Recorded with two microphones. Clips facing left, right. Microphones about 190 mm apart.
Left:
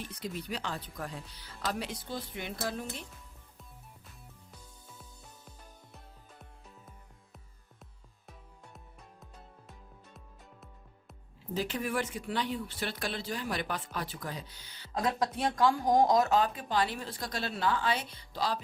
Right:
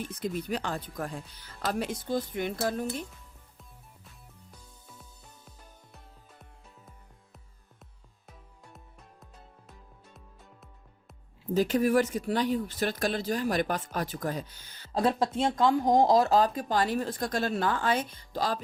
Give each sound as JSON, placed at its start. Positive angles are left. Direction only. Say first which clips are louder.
{"t": 0.0, "sound": "speech", "louder": "right 6 dB", "side_deg": -45}
{"t": 11.5, "sound": "speech", "louder": "right 9 dB", "side_deg": -40}
{"t": 14.9, "sound": "speech", "louder": "right 5 dB", "side_deg": -30}